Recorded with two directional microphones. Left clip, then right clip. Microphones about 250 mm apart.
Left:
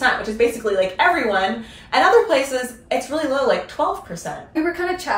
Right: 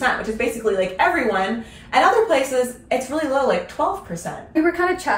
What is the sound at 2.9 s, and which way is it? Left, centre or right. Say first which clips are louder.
A woman's voice: even; centre.